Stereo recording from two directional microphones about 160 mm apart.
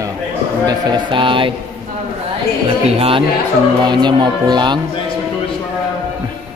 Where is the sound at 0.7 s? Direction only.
30° right (ahead or behind).